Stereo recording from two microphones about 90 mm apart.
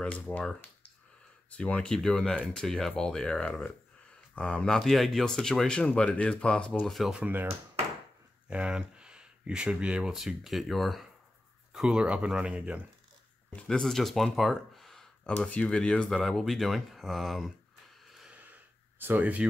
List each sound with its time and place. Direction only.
0.0 s speech: 15° left (ahead or behind)
6.7 s speech: centre (ahead or behind)
7.2 s speech: 20° right (ahead or behind)
13.6 s speech: 10° left (ahead or behind)
15.3 s speech: 15° left (ahead or behind); by 17.5 s centre (ahead or behind)
18.9 s speech: 20° right (ahead or behind)